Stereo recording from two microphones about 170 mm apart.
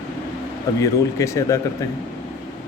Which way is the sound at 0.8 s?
20° left (ahead or behind).